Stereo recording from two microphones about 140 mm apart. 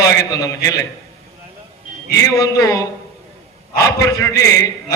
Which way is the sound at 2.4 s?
25° left (ahead or behind).